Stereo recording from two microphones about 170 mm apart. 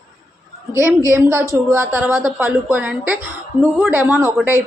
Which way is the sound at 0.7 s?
15° right (ahead or behind).